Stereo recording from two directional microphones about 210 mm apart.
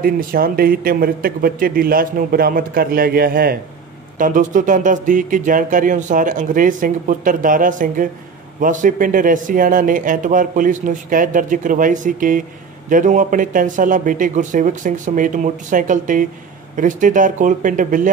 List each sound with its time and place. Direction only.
0.0 s speech: 45° right (ahead or behind)